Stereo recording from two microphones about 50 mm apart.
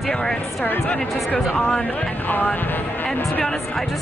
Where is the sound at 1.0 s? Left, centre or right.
Centre.